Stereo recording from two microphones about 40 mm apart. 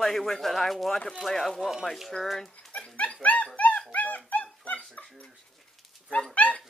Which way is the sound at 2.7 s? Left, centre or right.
Left.